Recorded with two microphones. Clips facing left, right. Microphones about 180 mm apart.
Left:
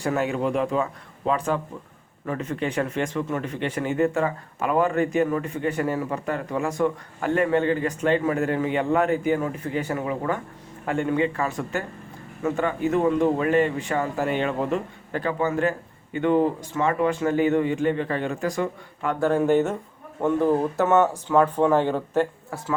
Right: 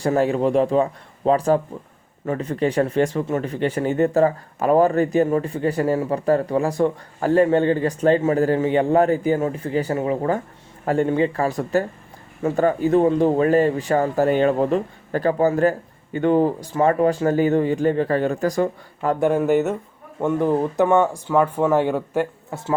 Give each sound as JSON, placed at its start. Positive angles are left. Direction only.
{"t": 0.0, "sound": "speech", "side_deg": -35}
{"t": 19.4, "sound": "speech", "side_deg": -5}